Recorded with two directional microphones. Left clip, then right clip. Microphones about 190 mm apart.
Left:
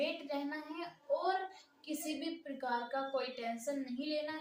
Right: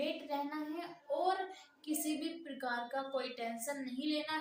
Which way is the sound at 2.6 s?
15° right (ahead or behind).